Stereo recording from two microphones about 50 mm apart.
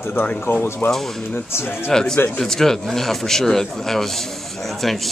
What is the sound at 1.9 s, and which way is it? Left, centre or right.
Speech, centre.